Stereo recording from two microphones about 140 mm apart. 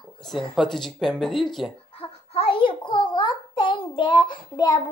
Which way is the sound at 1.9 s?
45° left (ahead or behind).